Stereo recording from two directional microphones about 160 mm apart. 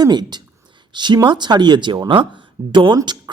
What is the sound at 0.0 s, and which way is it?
Speech, 25° right (ahead or behind).